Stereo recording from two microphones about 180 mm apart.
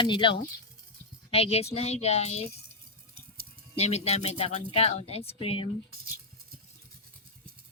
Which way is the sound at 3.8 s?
35° left (ahead or behind).